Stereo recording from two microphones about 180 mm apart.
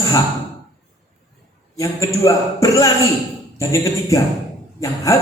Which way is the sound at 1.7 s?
20° left (ahead or behind).